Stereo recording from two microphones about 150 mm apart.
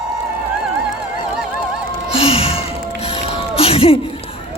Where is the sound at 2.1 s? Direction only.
40° left (ahead or behind).